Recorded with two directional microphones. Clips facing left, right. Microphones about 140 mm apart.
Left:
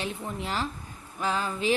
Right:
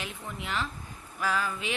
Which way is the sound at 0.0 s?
35° left (ahead or behind).